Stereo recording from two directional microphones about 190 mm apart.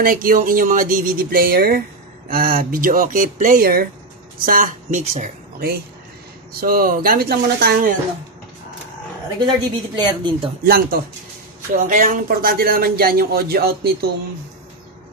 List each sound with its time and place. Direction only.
0.0 s a woman's voice: 50° right (ahead or behind)
9.9 s a woman's voice: 25° right (ahead or behind)
10.6 s speech: 50° right (ahead or behind)